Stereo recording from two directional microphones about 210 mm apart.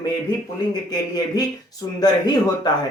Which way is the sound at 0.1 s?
20° left (ahead or behind).